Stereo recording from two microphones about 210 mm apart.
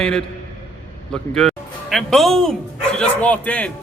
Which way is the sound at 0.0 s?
5° left (ahead or behind).